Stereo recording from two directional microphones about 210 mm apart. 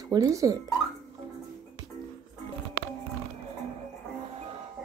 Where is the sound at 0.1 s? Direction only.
15° right (ahead or behind).